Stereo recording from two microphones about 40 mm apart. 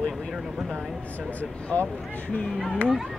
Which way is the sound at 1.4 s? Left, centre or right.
Left.